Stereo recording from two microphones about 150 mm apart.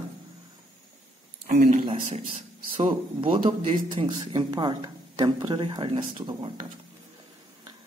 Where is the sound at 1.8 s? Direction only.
40° right (ahead or behind).